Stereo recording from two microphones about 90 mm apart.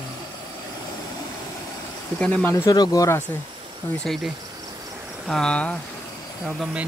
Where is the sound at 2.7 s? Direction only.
45° left (ahead or behind).